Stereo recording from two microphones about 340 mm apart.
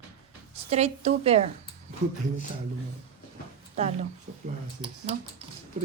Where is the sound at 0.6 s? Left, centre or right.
Centre.